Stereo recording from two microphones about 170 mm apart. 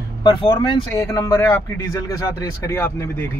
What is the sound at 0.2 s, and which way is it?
Speech, 30° left (ahead or behind).